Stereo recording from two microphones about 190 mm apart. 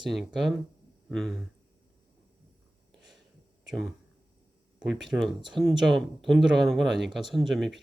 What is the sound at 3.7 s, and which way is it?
Speech, centre (ahead or behind).